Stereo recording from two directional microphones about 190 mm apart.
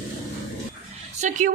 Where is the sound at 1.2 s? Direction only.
40° right (ahead or behind).